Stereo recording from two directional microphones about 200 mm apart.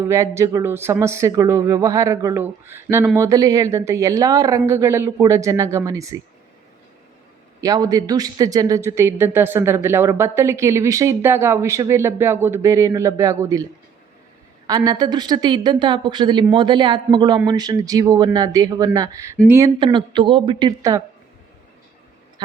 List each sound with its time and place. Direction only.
0.0 s speech: 15° right (ahead or behind)
7.6 s speech: 20° right (ahead or behind)
14.7 s a woman's voice: 20° right (ahead or behind)